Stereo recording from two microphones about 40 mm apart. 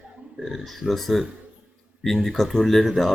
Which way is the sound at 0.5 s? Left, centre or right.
Centre.